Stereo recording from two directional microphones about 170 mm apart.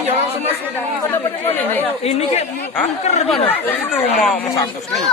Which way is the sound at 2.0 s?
40° left (ahead or behind).